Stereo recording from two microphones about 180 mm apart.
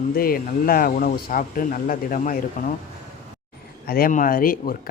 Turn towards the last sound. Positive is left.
turn(degrees=50)  # may be behind; listen again after turning